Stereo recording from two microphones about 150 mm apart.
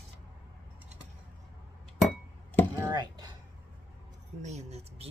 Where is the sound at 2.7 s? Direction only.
20° right (ahead or behind).